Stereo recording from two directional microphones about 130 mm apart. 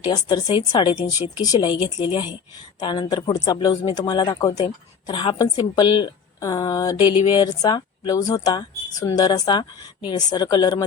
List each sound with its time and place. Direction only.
0.0 s speech: 35° left (ahead or behind)
4.6 s speech: 40° left (ahead or behind)